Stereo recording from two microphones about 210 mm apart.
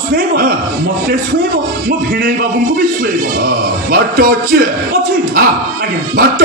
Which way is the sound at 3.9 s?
45° right (ahead or behind).